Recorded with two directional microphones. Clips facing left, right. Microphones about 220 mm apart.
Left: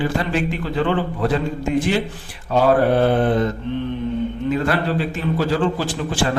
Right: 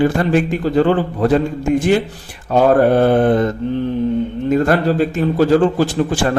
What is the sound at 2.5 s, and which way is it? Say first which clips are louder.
A man's voice: right 4 dB; 50° right (ahead or behind).